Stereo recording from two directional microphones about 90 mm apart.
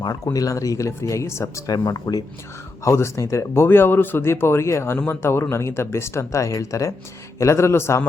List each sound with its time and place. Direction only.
0.3 s speech: 40° left (ahead or behind)
1.6 s speech: 45° left (ahead or behind)
2.8 s speech: 35° left (ahead or behind)